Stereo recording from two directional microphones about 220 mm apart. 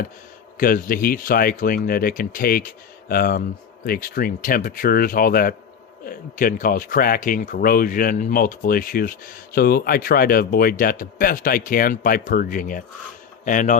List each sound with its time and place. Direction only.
0.5 s speech: 40° left (ahead or behind)